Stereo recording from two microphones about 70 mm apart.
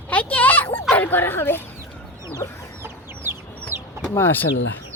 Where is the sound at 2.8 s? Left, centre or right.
Right.